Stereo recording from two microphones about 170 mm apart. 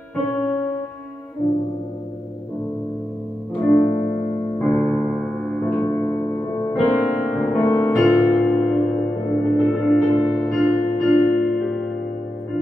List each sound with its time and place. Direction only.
0.1 s music: 10° left (ahead or behind)
3.6 s music: centre (ahead or behind)
6.7 s music: centre (ahead or behind)
7.5 s music: 15° left (ahead or behind)
8.0 s music: centre (ahead or behind)